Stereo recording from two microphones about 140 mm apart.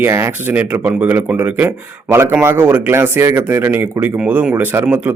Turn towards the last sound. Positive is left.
turn(degrees=-15)  # may be behind; listen again after turning